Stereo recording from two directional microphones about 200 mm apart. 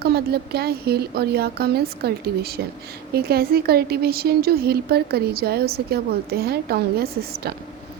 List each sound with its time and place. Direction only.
0.0 s speech: 50° right (ahead or behind)